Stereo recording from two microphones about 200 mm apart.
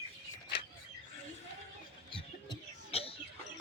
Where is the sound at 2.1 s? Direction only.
30° left (ahead or behind).